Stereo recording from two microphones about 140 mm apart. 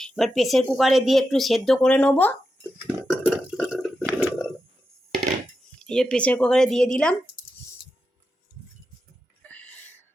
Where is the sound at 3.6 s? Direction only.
5° right (ahead or behind).